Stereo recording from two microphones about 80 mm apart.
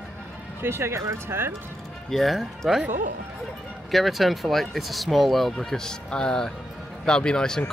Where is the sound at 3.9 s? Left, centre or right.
Centre.